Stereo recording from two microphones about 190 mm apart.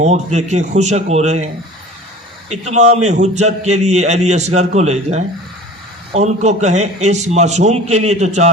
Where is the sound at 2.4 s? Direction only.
35° right (ahead or behind).